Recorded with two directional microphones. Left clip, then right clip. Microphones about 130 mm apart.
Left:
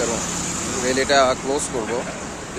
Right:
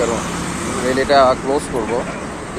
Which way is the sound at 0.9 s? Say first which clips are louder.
Right 5 dB; 25° left (ahead or behind).